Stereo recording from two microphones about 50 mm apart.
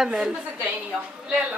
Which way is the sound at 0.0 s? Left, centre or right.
Centre.